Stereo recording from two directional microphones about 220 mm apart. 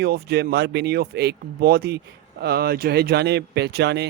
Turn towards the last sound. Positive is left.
turn(degrees=-50)  # may be behind; listen again after turning